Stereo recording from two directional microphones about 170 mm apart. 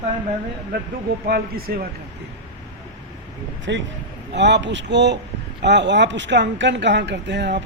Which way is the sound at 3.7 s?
90° right.